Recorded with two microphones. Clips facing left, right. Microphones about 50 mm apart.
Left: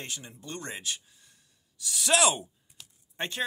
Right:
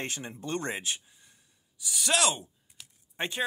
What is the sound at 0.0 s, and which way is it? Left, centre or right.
Speech, right.